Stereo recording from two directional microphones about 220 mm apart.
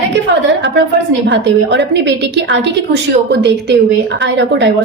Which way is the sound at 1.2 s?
55° right (ahead or behind).